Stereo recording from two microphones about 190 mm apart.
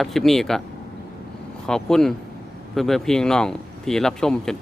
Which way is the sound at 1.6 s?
5° left (ahead or behind).